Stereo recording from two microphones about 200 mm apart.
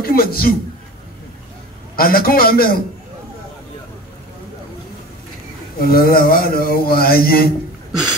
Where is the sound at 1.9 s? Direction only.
45° left (ahead or behind).